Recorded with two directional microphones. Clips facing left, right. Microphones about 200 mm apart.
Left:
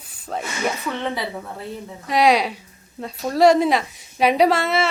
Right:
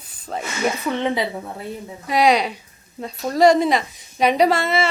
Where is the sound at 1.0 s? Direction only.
15° right (ahead or behind).